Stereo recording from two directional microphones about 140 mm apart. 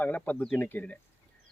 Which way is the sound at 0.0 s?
10° left (ahead or behind).